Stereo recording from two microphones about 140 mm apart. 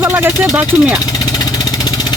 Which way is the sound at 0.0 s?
15° right (ahead or behind).